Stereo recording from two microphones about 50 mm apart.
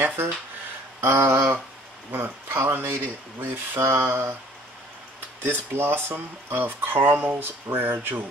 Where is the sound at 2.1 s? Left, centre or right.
Right.